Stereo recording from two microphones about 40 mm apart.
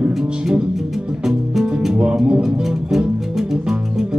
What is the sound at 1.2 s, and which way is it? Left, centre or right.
Music, centre.